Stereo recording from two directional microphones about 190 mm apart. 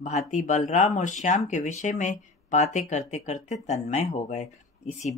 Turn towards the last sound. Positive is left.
turn(degrees=35)  # may be behind; listen again after turning